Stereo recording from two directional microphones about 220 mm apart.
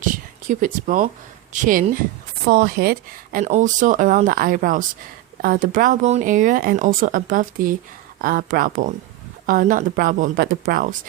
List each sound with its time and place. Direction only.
0.0 s speech: 35° right (ahead or behind)